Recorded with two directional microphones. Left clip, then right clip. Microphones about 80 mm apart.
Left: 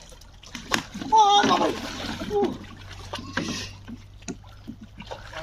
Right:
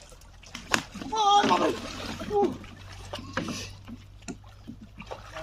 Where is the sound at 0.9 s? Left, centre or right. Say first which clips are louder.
Left 9 dB; centre.